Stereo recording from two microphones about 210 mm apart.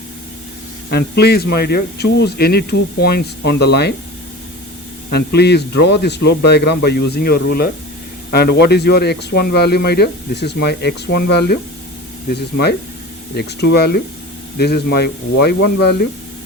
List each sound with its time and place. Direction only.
0.9 s speech: 50° left (ahead or behind)
5.1 s speech: 50° left (ahead or behind)